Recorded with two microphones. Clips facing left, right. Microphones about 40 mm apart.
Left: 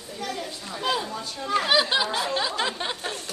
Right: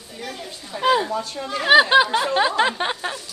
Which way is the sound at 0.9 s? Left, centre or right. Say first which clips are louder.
Right 8 dB; right.